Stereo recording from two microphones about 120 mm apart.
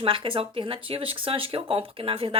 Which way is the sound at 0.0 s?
50° right (ahead or behind).